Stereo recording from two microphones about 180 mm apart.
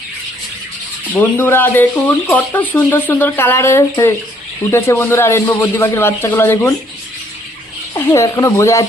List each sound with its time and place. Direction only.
1.1 s speech: 10° left (ahead or behind)
7.9 s speech: 15° left (ahead or behind)